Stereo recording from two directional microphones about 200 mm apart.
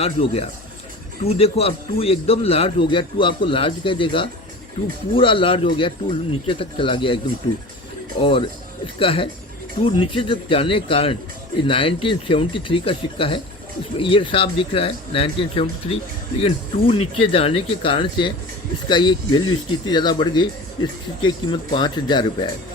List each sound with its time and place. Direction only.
0.0 s speech: 30° left (ahead or behind)
8.2 s speech: 25° left (ahead or behind)